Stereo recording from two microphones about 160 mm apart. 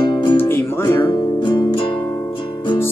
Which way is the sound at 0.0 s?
30° left (ahead or behind).